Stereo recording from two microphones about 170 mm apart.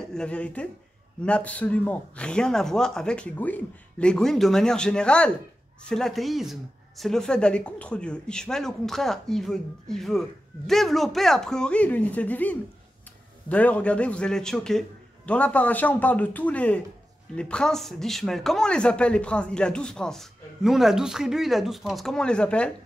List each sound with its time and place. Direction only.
0.0 s a man's voice: 5° left (ahead or behind)